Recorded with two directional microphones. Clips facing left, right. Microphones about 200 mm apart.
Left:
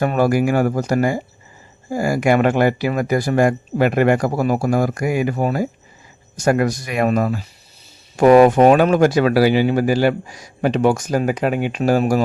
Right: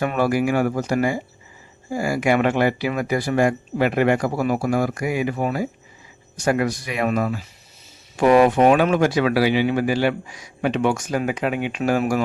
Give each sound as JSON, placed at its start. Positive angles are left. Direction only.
{"t": 0.0, "sound": "speech", "side_deg": 40}